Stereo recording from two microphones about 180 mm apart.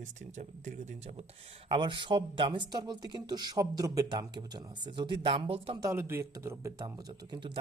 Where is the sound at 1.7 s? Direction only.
25° right (ahead or behind).